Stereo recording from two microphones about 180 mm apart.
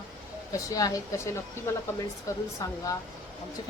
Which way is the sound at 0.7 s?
20° left (ahead or behind).